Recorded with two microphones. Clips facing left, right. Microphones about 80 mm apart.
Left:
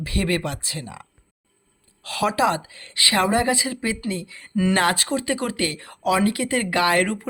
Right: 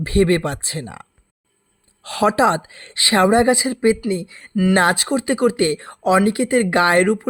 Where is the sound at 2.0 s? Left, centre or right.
Right.